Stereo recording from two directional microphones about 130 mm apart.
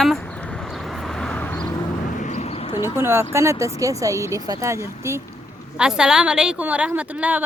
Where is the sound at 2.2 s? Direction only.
60° left (ahead or behind).